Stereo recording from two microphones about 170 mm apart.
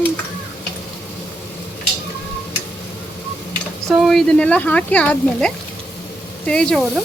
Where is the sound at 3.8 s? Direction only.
Centre (ahead or behind).